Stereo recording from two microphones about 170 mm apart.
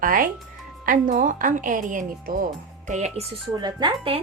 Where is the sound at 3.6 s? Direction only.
30° right (ahead or behind).